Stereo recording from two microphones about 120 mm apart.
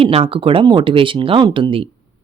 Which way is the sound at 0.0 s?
55° right (ahead or behind).